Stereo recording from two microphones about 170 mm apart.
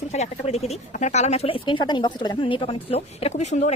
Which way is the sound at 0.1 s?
40° left (ahead or behind).